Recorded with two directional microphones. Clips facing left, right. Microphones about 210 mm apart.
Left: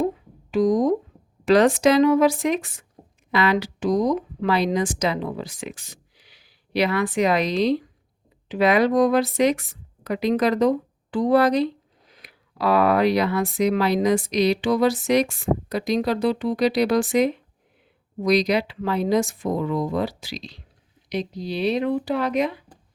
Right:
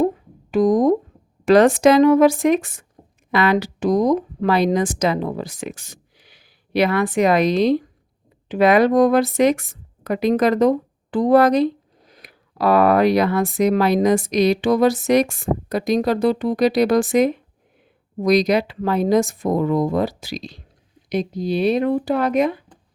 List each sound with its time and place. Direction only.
0.5 s speech: 50° right (ahead or behind)